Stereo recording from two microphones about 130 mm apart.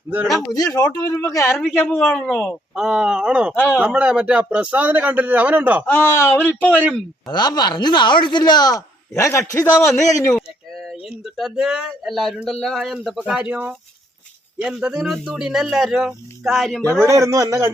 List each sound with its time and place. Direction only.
0.5 s a man's voice: 30° left (ahead or behind); by 5.8 s 10° right (ahead or behind)
5.8 s speech: 15° left (ahead or behind)
7.3 s a man's voice: 35° left (ahead or behind)
9.8 s speech: centre (ahead or behind)
10.3 s a sound: 5° left (ahead or behind)
11.0 s speech: centre (ahead or behind)
17.1 s a man's voice: 25° right (ahead or behind)